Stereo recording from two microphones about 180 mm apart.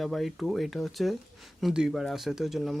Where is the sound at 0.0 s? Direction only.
Centre (ahead or behind).